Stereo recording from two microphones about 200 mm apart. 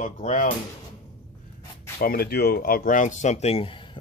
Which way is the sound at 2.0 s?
50° left (ahead or behind).